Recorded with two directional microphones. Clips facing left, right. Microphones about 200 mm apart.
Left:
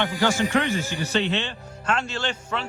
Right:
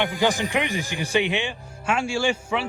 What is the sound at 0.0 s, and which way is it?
A man's voice, 15° right (ahead or behind).